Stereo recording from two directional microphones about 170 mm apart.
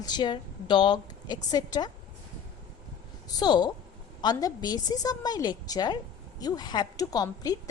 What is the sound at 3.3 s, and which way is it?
A woman's voice, 25° left (ahead or behind).